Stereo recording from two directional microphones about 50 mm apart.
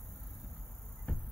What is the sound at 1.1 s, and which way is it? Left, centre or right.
Music, left.